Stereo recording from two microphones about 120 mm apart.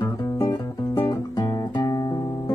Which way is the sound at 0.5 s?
20° left (ahead or behind).